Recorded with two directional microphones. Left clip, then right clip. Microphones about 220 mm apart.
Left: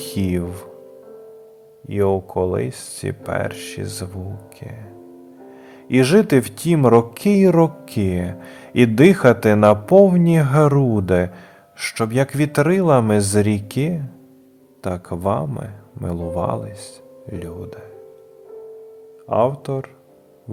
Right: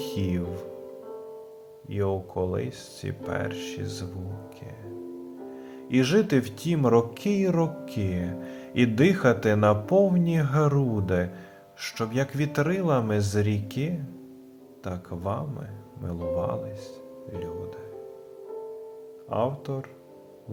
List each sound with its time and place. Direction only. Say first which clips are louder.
0.0 s speech: left 6 dB; 35° left (ahead or behind)
1.9 s speech: left 10 dB; 35° left (ahead or behind)
5.9 s speech: left 8 dB; 35° left (ahead or behind)
19.3 s speech: left 10 dB; 35° left (ahead or behind)